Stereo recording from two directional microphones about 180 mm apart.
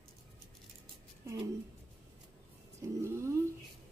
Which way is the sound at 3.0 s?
15° right (ahead or behind).